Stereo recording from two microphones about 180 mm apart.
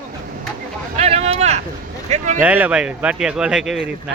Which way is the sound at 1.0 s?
35° right (ahead or behind).